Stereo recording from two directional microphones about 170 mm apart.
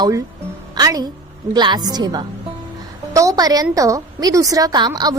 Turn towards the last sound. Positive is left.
turn(degrees=-25)  # may be behind; listen again after turning